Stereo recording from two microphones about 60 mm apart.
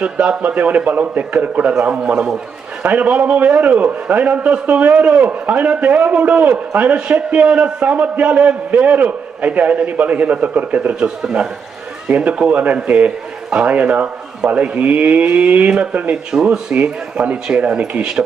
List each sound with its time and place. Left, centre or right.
0.0 s a man's voice: right
16.4 s a man's voice: centre